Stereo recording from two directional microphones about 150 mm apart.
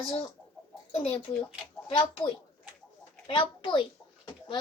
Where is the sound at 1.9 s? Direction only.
35° left (ahead or behind).